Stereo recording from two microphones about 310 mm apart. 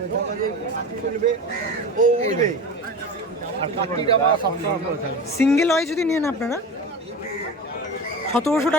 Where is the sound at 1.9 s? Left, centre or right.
Right.